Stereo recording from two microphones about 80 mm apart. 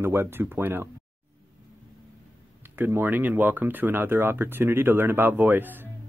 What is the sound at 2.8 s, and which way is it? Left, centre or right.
Speech, right.